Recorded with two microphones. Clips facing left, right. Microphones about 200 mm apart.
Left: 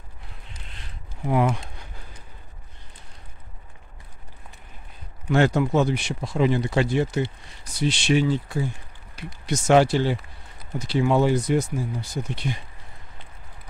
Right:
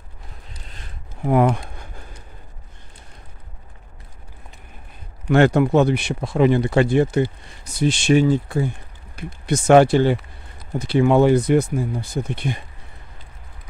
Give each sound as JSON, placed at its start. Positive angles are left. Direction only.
{"t": 1.2, "sound": "speech", "side_deg": -55}
{"t": 5.3, "sound": "speech", "side_deg": -60}